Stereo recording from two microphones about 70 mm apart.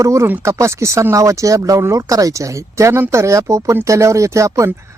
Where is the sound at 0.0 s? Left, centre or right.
Right.